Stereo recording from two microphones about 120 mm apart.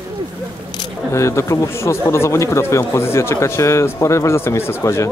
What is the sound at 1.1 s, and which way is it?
Speech, 25° left (ahead or behind).